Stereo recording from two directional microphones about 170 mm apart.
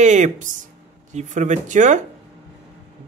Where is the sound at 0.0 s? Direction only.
45° right (ahead or behind).